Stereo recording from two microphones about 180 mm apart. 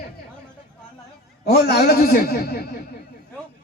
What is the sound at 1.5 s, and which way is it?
A man's voice, 60° left (ahead or behind).